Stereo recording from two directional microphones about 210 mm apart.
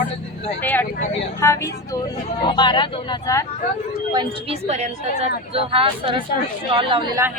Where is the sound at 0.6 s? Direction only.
10° left (ahead or behind).